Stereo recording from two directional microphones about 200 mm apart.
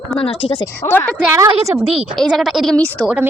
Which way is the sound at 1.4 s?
15° right (ahead or behind).